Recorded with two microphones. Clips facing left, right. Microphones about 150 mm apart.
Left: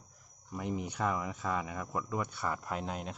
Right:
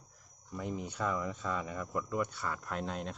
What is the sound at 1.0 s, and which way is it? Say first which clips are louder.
Speech: even; 90° left.